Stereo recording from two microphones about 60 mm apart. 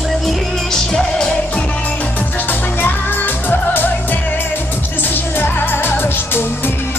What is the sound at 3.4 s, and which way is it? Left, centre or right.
Music, left.